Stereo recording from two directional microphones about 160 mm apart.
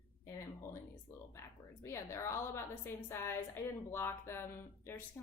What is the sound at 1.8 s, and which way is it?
A woman's voice, 15° left (ahead or behind).